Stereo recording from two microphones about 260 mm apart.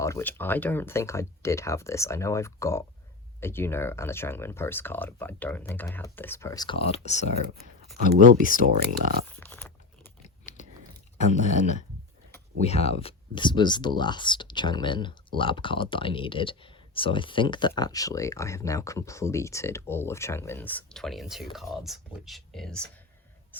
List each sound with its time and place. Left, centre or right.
0.0 s speech: centre; by 7.3 s left
8.5 s speech: right
9.3 s a sound: centre
10.2 s biting: left
11.2 s speech: left; by 22.9 s centre